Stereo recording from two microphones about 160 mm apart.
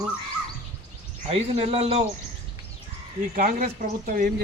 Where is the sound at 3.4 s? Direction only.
55° right (ahead or behind).